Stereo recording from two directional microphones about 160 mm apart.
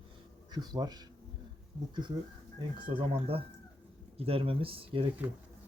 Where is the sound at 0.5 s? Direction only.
25° right (ahead or behind).